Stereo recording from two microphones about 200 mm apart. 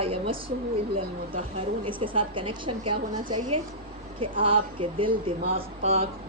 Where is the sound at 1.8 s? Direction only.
25° right (ahead or behind).